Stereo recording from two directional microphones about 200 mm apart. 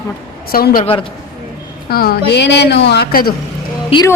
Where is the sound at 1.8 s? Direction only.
50° left (ahead or behind).